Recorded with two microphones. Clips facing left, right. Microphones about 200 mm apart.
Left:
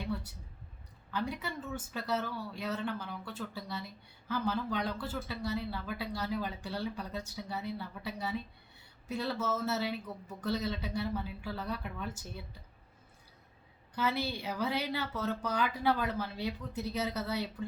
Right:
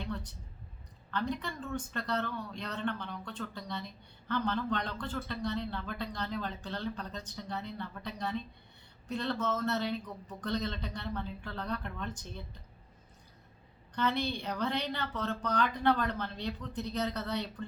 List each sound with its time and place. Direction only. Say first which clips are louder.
0.0 s a sound: left 2 dB; 10° left (ahead or behind)
1.1 s a woman's voice: right 1 dB; 5° left (ahead or behind)
13.9 s a woman's voice: right 1 dB; 5° left (ahead or behind)